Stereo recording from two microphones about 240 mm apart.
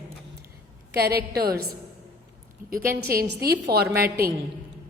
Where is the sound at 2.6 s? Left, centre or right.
Right.